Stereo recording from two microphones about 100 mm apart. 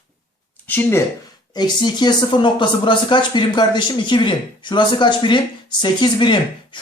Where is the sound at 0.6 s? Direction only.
20° left (ahead or behind).